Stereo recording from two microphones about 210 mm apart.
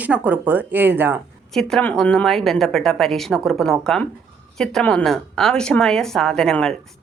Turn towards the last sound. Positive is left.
turn(degrees=0)  # may be behind; listen again after turning